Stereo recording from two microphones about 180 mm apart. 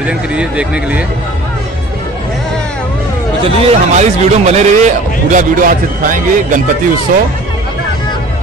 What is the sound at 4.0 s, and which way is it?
A man's voice, 40° right (ahead or behind).